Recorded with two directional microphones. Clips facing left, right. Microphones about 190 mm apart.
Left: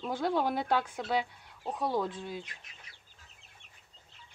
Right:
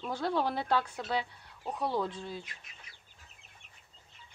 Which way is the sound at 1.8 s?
15° left (ahead or behind).